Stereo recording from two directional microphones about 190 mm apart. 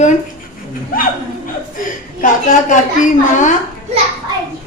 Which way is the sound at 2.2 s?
45° left (ahead or behind).